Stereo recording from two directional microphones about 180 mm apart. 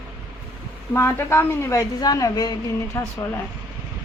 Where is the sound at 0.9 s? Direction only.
15° left (ahead or behind).